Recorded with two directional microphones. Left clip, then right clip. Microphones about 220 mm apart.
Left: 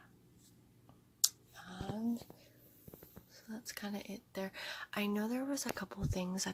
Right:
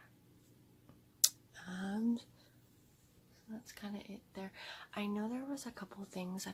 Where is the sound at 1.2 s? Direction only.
20° right (ahead or behind).